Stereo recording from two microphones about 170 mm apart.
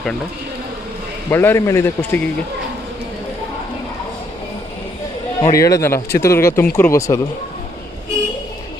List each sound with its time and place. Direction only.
1.3 s speech: 15° left (ahead or behind)
5.4 s speech: 20° left (ahead or behind)